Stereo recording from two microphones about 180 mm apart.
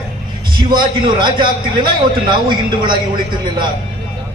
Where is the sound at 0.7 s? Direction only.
25° right (ahead or behind).